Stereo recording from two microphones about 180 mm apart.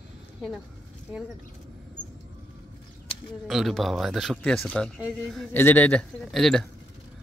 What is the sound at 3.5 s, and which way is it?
Speech, centre (ahead or behind).